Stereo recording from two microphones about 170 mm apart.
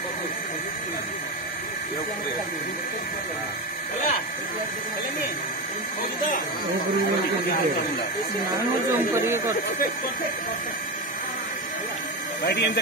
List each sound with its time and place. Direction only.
8.8 s speech: 15° right (ahead or behind)